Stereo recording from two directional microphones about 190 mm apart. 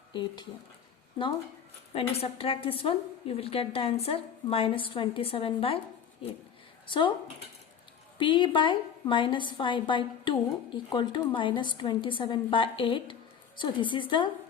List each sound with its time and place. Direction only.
0.1 s a woman's voice: 25° left (ahead or behind)
1.9 s a woman's voice: 30° left (ahead or behind)
6.8 s speech: 25° left (ahead or behind)
8.2 s a woman's voice: 25° left (ahead or behind)